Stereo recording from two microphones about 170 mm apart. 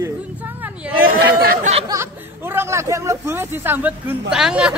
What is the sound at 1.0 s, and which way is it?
Speech, 60° right (ahead or behind).